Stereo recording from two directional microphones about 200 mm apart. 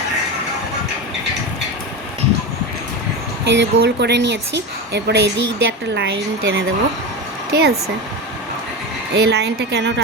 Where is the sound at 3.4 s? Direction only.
60° right (ahead or behind).